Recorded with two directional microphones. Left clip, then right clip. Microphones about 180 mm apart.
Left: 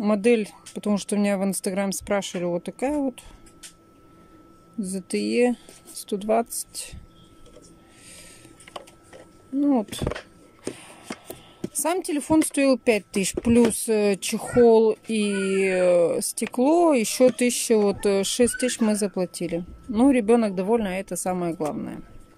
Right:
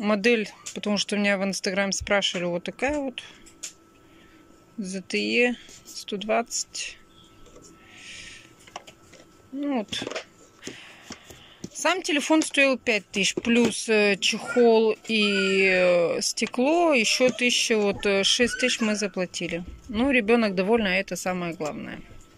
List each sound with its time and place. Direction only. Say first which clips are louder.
0.0 s speech: left 1 dB; 15° left (ahead or behind)
4.8 s speech: even; 25° left (ahead or behind)
8.0 s mechanisms: right 7 dB; 25° left (ahead or behind)
9.6 s speech: left 5 dB; 20° left (ahead or behind)
10.6 s a sound: left 4 dB; 20° left (ahead or behind)
11.8 s speech: right 2 dB; 20° left (ahead or behind)